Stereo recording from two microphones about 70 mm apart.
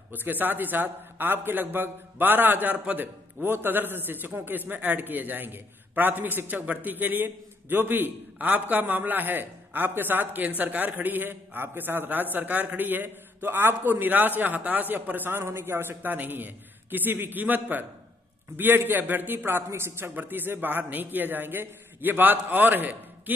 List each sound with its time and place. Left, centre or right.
0.1 s a man's voice: right